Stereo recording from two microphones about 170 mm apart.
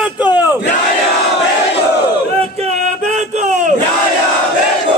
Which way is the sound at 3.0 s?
45° right (ahead or behind).